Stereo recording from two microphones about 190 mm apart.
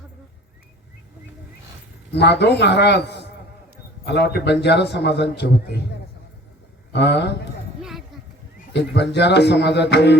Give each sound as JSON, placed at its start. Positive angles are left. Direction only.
{"t": 2.1, "sound": "a man's voice", "side_deg": 60}
{"t": 6.9, "sound": "a man's voice", "side_deg": 65}
{"t": 7.8, "sound": "a sound", "side_deg": 0}
{"t": 8.7, "sound": "a man's voice", "side_deg": 60}